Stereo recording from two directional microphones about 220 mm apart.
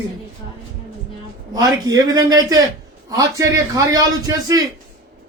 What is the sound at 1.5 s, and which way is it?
A man's voice, 15° right (ahead or behind).